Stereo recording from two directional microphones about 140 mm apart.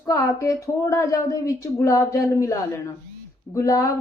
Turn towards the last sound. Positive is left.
turn(degrees=25)  # may be behind; listen again after turning